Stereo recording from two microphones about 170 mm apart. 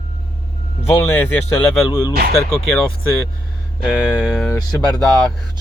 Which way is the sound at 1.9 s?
25° left (ahead or behind).